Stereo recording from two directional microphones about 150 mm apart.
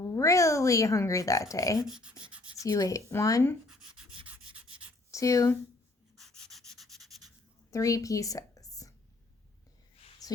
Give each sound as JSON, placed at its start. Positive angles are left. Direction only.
{"t": 0.0, "sound": "speech", "side_deg": 20}
{"t": 1.8, "sound": "speech", "side_deg": -5}
{"t": 2.6, "sound": "speech", "side_deg": 25}
{"t": 3.7, "sound": "a sound", "side_deg": 0}
{"t": 4.3, "sound": "rub", "side_deg": -10}
{"t": 5.1, "sound": "speech", "side_deg": 20}
{"t": 6.1, "sound": "rub", "side_deg": 0}
{"t": 7.7, "sound": "a woman's voice", "side_deg": 20}
{"t": 10.2, "sound": "a sound", "side_deg": 25}